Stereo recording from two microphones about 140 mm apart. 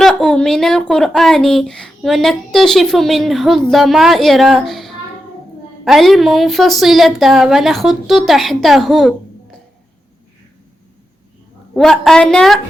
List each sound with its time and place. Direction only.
0.0 s a woman's voice: 5° left (ahead or behind)
11.7 s a woman's voice: 5° left (ahead or behind)